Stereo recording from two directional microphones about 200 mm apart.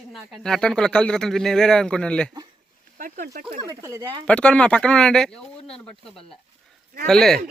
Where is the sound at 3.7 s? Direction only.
15° right (ahead or behind).